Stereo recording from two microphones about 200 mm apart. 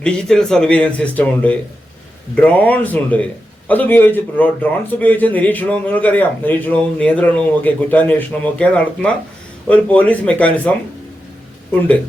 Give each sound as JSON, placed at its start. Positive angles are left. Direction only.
{"t": 0.0, "sound": "speech", "side_deg": 5}